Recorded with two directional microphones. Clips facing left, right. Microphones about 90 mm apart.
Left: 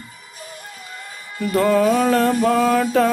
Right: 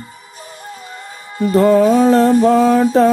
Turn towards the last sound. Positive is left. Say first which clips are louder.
# right 5 dB
turn(degrees=-30)  # may be behind; listen again after turning